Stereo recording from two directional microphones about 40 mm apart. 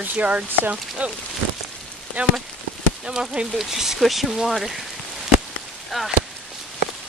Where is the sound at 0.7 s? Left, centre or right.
Right.